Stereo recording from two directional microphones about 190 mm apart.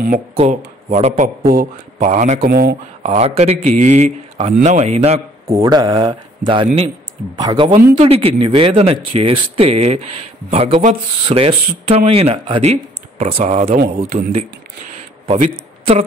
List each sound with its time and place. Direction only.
0.4 s speech: 40° right (ahead or behind)
2.4 s speech: 55° right (ahead or behind)
3.0 s speech: 35° right (ahead or behind)
5.5 s a man's voice: 20° right (ahead or behind); by 15.5 s 40° right (ahead or behind)